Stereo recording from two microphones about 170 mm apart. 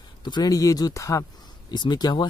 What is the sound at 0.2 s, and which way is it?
Speech, 25° left (ahead or behind).